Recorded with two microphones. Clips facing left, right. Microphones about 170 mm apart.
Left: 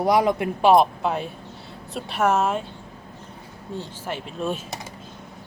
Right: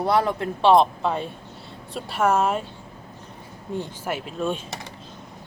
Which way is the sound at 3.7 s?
10° right (ahead or behind).